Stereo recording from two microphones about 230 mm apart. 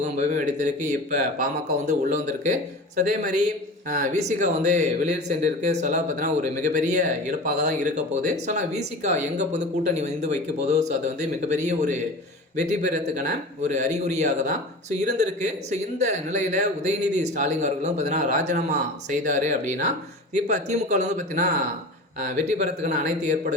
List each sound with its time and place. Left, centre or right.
0.0 s speech: right